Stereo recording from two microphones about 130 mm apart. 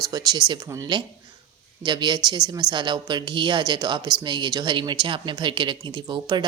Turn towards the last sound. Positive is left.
turn(degrees=-35)  # may be behind; listen again after turning